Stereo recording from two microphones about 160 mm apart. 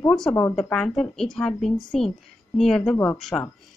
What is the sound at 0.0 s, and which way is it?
A woman's voice, 5° left (ahead or behind).